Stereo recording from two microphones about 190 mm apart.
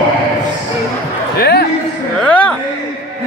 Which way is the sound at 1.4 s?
55° left (ahead or behind).